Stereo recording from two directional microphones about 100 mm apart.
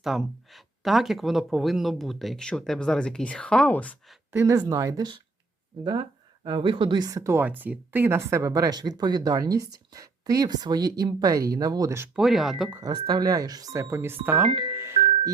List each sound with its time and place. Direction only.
0.0 s speech: centre (ahead or behind); by 3.9 s 15° left (ahead or behind)
4.3 s speech: 20° right (ahead or behind)
4.7 s speech: 35° right (ahead or behind)
5.7 s speech: 60° right (ahead or behind); by 7.3 s 35° right (ahead or behind)
7.3 s speech: 20° right (ahead or behind); by 11.9 s 40° right (ahead or behind)
12.1 s speech: 5° right (ahead or behind)
12.8 s speech: 45° right (ahead or behind); by 14.4 s 20° right (ahead or behind)
14.4 s speech: 50° right (ahead or behind)
14.7 s music: 25° right (ahead or behind)